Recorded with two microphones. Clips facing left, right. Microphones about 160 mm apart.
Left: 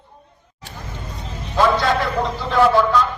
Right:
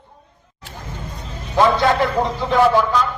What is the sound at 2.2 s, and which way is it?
Speech, 15° right (ahead or behind).